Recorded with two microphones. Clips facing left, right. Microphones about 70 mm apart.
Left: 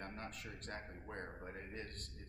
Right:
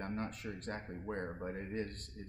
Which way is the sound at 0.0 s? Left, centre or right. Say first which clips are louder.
Right 8 dB; right.